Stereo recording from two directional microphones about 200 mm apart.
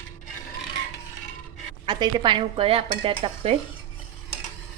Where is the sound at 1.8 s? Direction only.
20° right (ahead or behind).